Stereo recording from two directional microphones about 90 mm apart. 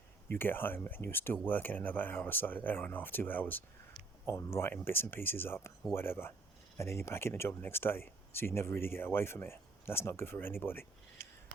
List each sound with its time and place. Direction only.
0.3 s speech: 25° left (ahead or behind)